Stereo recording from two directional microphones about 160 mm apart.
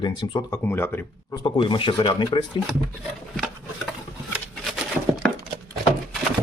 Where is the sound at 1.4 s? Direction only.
30° left (ahead or behind).